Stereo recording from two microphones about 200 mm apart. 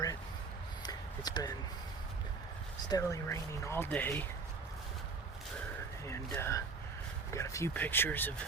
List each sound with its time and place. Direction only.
0.8 s a sound: 20° left (ahead or behind)
2.9 s speech: 15° left (ahead or behind)
6.1 s speech: 10° left (ahead or behind)